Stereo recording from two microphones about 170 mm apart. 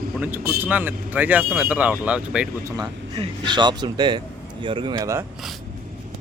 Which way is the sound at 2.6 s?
25° right (ahead or behind).